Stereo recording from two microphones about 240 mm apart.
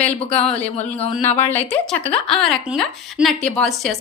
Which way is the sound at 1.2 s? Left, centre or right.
Centre.